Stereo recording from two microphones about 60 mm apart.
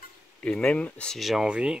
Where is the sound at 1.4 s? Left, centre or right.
Centre.